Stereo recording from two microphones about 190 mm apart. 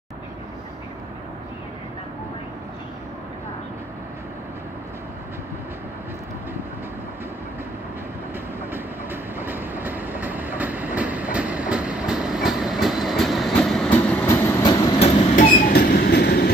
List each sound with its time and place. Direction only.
8.7 s train: 10° right (ahead or behind); by 14.9 s 20° left (ahead or behind)
15.0 s train: 30° left (ahead or behind)
15.3 s train: 45° left (ahead or behind)
15.8 s train: 60° left (ahead or behind)